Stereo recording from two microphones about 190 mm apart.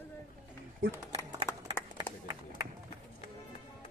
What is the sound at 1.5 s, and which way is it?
Clapping, 15° left (ahead or behind).